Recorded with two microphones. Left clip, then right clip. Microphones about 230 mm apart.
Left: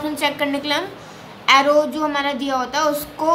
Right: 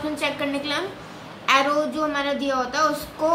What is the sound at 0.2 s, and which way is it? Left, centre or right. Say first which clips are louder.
A woman's voice: left 6 dB; left.